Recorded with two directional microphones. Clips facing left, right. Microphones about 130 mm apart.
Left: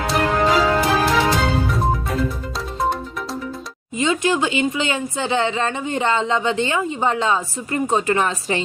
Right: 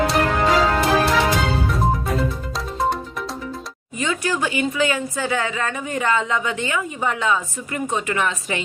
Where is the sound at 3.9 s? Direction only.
20° left (ahead or behind).